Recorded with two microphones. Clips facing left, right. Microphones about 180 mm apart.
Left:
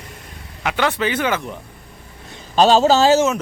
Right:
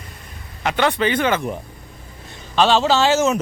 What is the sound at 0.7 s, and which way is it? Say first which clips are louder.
Speech: right 1 dB; 5° left (ahead or behind).